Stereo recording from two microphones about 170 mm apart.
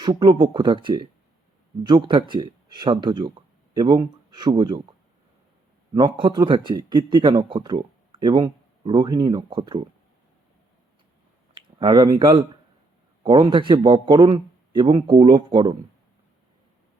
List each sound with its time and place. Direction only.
0.0 s speech: 25° right (ahead or behind)
11.8 s speech: 25° right (ahead or behind)